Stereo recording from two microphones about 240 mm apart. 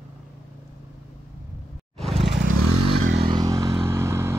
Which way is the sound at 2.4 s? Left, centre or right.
Right.